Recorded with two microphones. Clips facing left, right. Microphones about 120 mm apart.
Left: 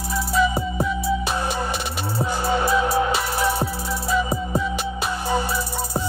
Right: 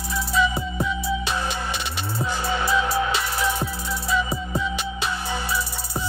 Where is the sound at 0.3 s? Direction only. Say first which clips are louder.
Left 2 dB; 45° left (ahead or behind).